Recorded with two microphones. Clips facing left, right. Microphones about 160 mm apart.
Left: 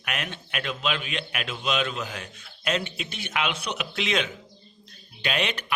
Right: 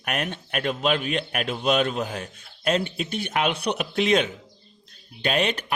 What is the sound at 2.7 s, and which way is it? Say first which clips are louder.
Speech: right 5 dB; 35° right (ahead or behind).